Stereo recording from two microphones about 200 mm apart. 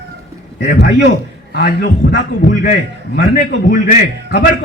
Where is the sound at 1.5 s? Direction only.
60° left (ahead or behind).